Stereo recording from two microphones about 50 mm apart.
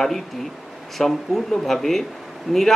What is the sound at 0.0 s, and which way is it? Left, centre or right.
Speech, centre.